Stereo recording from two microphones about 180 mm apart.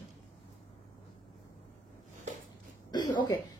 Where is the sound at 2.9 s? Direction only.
25° left (ahead or behind).